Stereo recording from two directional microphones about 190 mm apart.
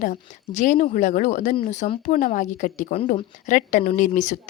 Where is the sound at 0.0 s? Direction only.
40° left (ahead or behind).